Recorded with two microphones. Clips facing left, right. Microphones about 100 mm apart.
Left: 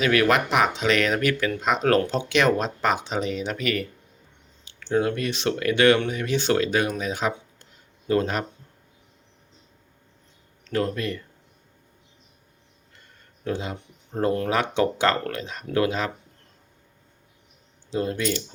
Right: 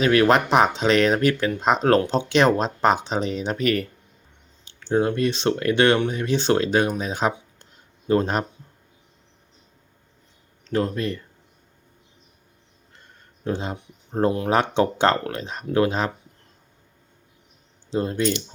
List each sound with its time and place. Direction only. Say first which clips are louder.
0.0 s speech: right 3 dB; 30° right (ahead or behind)
4.9 s speech: right 3 dB; 25° right (ahead or behind)
7.0 s a sound: right 2 dB; 30° right (ahead or behind)
10.6 s speech: right 2 dB; 25° right (ahead or behind)
13.4 s speech: right 2 dB; 30° right (ahead or behind)
17.9 s speech: right 2 dB; 25° right (ahead or behind)